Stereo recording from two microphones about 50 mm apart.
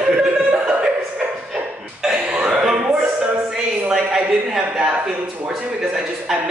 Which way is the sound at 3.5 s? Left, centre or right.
Centre.